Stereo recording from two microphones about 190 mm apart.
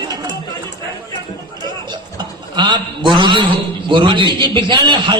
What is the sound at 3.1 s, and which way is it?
A man's voice, 25° right (ahead or behind).